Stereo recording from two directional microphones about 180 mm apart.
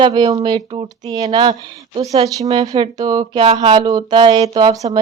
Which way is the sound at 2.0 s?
20° right (ahead or behind).